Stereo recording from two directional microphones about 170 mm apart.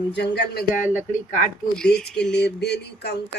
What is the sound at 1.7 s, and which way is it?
Speech, 5° left (ahead or behind).